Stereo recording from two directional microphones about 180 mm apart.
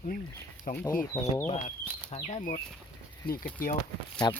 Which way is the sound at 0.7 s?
50° left (ahead or behind).